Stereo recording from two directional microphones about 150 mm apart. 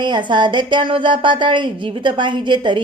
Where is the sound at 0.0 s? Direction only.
30° right (ahead or behind).